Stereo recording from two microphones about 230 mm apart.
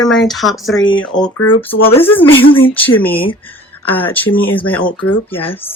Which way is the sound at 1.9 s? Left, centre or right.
Centre.